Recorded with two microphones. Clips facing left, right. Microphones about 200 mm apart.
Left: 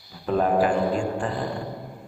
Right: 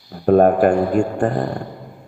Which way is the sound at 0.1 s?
55° right (ahead or behind).